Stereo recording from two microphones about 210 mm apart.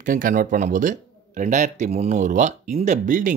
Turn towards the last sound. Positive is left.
turn(degrees=-35)  # may be behind; listen again after turning